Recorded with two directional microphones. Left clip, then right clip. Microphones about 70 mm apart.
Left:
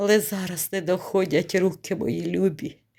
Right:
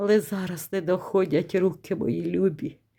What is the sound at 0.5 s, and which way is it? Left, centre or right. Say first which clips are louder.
Speech: left 1 dB; right.